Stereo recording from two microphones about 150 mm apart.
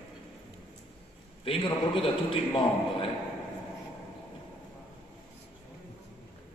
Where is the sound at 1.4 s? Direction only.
35° left (ahead or behind).